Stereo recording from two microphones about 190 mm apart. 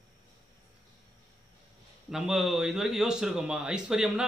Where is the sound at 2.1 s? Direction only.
Centre (ahead or behind).